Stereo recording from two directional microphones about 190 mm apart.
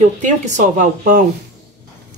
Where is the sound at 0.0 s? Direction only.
40° right (ahead or behind).